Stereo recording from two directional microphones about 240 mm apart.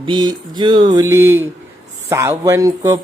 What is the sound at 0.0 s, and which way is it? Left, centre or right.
Mantra, centre.